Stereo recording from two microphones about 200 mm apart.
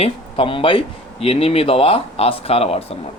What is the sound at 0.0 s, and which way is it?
A man's voice, 25° left (ahead or behind).